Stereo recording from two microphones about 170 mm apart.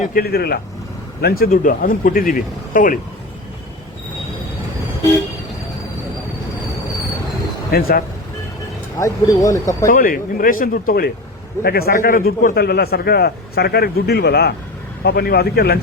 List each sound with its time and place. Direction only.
0.0 s speech: 60° left (ahead or behind)
7.7 s speech: 60° left (ahead or behind)
9.0 s speech: 20° left (ahead or behind)
9.8 s a man's voice: 55° left (ahead or behind)